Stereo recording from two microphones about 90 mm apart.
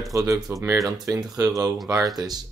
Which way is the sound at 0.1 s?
40° right (ahead or behind).